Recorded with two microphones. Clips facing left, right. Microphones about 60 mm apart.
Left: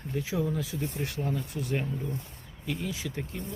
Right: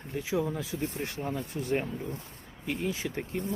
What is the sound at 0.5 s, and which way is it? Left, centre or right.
Speech, right.